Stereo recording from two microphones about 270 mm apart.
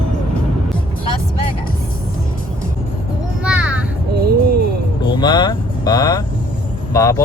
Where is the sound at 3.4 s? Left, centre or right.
Centre.